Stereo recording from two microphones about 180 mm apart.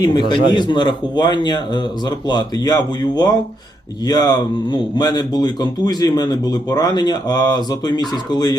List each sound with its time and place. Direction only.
0.0 s speech: 25° left (ahead or behind)